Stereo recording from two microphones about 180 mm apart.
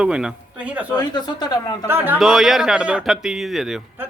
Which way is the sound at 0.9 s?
20° left (ahead or behind).